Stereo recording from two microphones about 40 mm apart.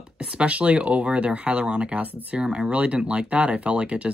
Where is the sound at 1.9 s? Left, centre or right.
Right.